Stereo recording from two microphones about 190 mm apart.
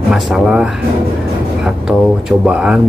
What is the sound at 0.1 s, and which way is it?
Speech, 5° right (ahead or behind).